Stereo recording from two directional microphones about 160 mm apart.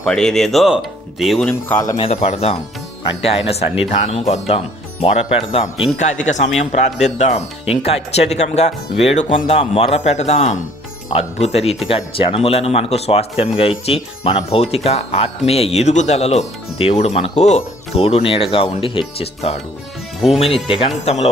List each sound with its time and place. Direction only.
0.0 s speech: 5° left (ahead or behind)
1.5 s speech: 10° left (ahead or behind)
2.0 s speech: 40° left (ahead or behind)